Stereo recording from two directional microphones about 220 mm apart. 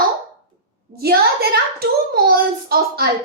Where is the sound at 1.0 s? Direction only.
45° right (ahead or behind).